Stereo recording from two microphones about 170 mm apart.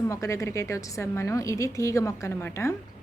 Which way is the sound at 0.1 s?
20° left (ahead or behind).